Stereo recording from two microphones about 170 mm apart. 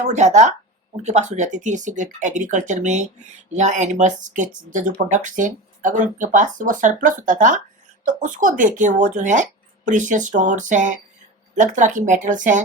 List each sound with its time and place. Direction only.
0.1 s speech: 45° right (ahead or behind)